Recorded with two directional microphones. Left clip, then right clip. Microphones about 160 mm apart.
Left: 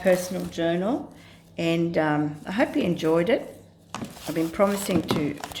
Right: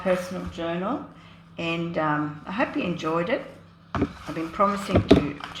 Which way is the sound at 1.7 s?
45° left (ahead or behind).